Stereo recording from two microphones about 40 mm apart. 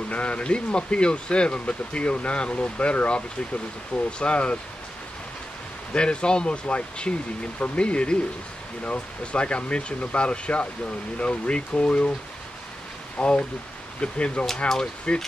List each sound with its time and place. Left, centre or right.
0.1 s speech: left
5.9 s speech: left
13.2 s speech: left